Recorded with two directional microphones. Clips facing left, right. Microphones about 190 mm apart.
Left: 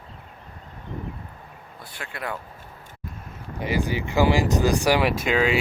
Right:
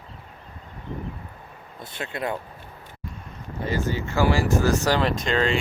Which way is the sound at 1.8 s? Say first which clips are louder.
Right 5 dB; 20° right (ahead or behind).